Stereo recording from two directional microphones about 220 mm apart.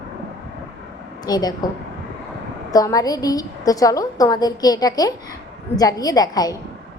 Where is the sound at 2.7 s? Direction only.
15° left (ahead or behind).